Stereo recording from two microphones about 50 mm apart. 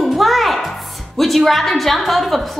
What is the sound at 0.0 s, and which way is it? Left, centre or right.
Music, centre.